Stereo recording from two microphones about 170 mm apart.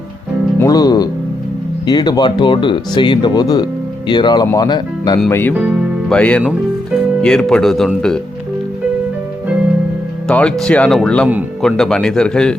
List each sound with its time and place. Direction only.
0.6 s music: 20° left (ahead or behind)
1.9 s speech: 25° left (ahead or behind)
5.3 s speech: 10° left (ahead or behind)
10.2 s speech: 5° left (ahead or behind)